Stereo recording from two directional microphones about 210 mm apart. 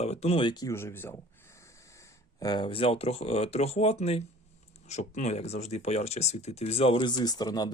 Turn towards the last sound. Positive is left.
turn(degrees=20)  # may be behind; listen again after turning